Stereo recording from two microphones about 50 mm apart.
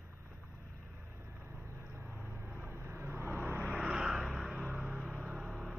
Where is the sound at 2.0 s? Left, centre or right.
Right.